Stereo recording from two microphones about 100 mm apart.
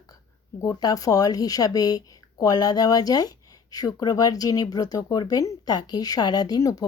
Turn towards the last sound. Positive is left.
turn(degrees=35)  # may be behind; listen again after turning